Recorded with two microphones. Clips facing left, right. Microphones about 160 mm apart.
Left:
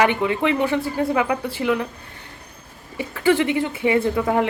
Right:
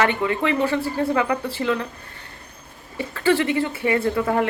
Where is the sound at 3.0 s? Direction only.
15° left (ahead or behind).